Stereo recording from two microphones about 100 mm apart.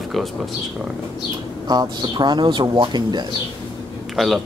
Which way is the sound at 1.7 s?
45° right (ahead or behind).